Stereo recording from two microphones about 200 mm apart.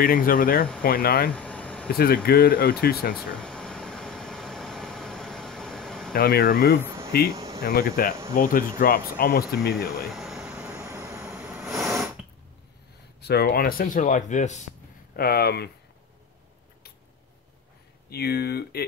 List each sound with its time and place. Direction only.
0.0 s speech: 45° left (ahead or behind)
1.3 s air conditioning: 5° left (ahead or behind)
1.9 s speech: 50° left (ahead or behind)
3.2 s air conditioning: centre (ahead or behind)
6.1 s speech: 50° left (ahead or behind)
6.8 s a sound: 15° right (ahead or behind)
7.1 s speech: 50° left (ahead or behind)
7.3 s air conditioning: 15° right (ahead or behind)
7.6 s speech: 50° left (ahead or behind)
10.1 s vehicle: centre (ahead or behind)
13.2 s speech: 55° left (ahead or behind); by 14.6 s 35° left (ahead or behind)
15.1 s speech: 50° left (ahead or behind)
18.1 s speech: 50° left (ahead or behind)